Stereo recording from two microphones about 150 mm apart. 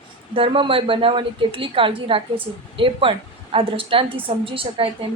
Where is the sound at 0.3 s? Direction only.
35° right (ahead or behind).